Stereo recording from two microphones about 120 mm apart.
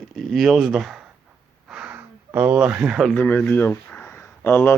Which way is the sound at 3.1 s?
20° left (ahead or behind).